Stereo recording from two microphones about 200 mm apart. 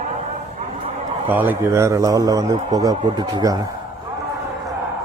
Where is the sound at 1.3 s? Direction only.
10° right (ahead or behind).